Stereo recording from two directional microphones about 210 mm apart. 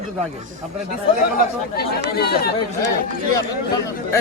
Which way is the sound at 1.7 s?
45° left (ahead or behind).